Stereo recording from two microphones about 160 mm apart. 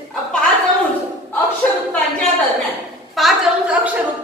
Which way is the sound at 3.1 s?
5° right (ahead or behind).